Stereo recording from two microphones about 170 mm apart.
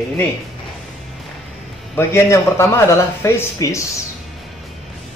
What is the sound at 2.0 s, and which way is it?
Speech, 15° left (ahead or behind).